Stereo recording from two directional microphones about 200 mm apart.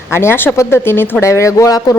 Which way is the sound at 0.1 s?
10° left (ahead or behind).